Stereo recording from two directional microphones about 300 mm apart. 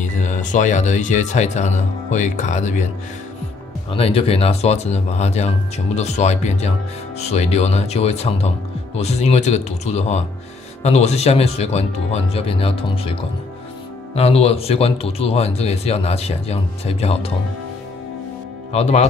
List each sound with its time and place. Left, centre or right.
0.0 s speech: left
3.9 s speech: centre
18.7 s speech: left